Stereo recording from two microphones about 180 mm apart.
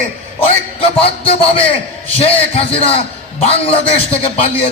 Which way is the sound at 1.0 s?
30° left (ahead or behind).